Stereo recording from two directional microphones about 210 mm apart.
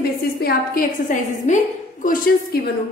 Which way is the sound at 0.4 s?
45° left (ahead or behind).